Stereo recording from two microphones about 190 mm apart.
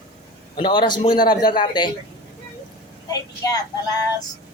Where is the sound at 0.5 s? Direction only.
25° left (ahead or behind).